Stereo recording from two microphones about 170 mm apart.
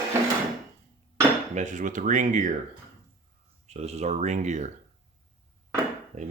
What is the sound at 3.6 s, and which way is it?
Speech, 40° right (ahead or behind).